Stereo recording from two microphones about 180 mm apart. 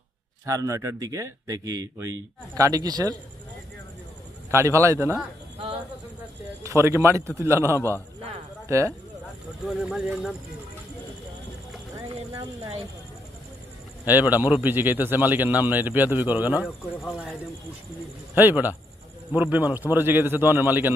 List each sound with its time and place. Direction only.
0.4 s a man's voice: 20° right (ahead or behind)
4.5 s a man's voice: 15° right (ahead or behind)
5.5 s a sound: 30° right (ahead or behind)
6.6 s a man's voice: 15° right (ahead or behind)
9.6 s speech: 5° right (ahead or behind)
14.0 s a man's voice: 10° right (ahead or behind)
18.3 s a man's voice: 10° right (ahead or behind)